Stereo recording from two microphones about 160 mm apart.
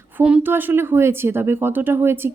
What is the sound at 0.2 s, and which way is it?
Speech, 10° right (ahead or behind).